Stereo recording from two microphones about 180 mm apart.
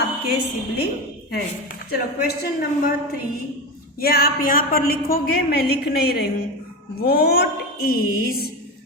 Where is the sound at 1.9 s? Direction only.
60° left (ahead or behind).